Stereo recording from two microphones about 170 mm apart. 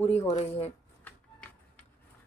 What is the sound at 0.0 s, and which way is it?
Speech, 10° left (ahead or behind).